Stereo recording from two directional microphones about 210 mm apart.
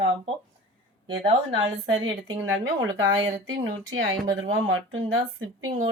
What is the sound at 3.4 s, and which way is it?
Speech, 65° right (ahead or behind).